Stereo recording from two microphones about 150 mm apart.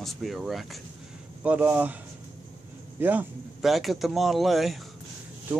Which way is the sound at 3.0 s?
10° right (ahead or behind).